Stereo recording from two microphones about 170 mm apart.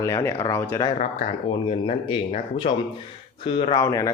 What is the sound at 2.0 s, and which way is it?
Speech, 30° left (ahead or behind).